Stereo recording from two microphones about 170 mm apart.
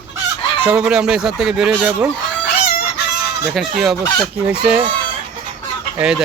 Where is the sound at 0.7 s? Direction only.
5° right (ahead or behind).